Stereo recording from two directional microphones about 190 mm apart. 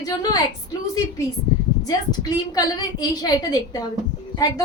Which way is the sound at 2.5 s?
20° left (ahead or behind).